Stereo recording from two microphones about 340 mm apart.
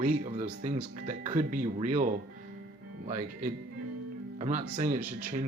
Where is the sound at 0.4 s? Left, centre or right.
Right.